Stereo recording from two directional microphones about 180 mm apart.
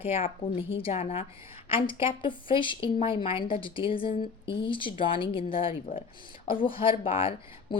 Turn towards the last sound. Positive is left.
turn(degrees=30)  # may be behind; listen again after turning